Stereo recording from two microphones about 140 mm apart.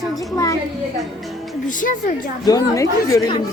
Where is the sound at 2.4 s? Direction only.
25° left (ahead or behind).